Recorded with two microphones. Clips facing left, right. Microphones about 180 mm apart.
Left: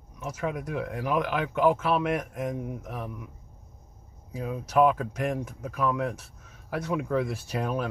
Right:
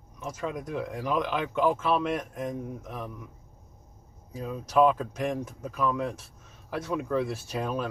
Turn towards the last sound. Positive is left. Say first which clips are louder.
# left 1 dB
turn(degrees=10)  # may be behind; listen again after turning